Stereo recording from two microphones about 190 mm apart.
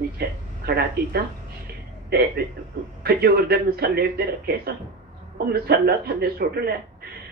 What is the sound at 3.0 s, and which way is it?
A man's voice, 55° right (ahead or behind).